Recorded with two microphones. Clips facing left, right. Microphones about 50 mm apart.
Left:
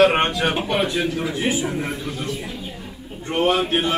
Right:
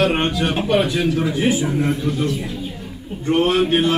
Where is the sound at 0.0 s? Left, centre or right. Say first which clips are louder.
Left 2 dB; left.